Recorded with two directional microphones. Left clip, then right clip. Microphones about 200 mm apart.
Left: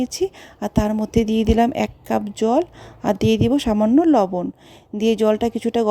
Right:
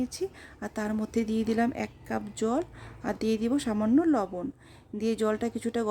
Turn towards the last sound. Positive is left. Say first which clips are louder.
# left 11 dB
turn(degrees=30)  # may be behind; listen again after turning